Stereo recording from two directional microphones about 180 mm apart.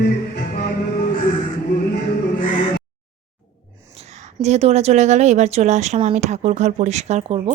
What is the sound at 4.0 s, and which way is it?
A woman's voice, 40° right (ahead or behind).